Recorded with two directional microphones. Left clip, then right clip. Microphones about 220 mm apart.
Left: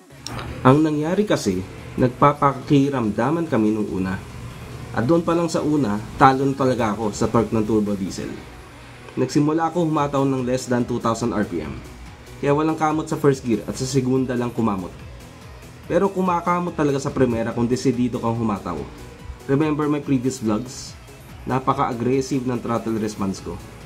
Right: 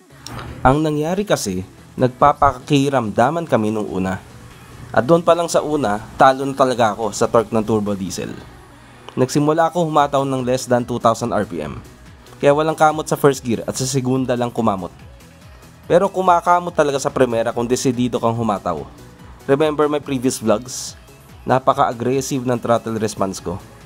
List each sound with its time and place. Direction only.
0.2 s a sound: centre (ahead or behind)
0.6 s speech: 45° right (ahead or behind)
9.2 s speech: 45° right (ahead or behind)
15.9 s speech: 45° right (ahead or behind)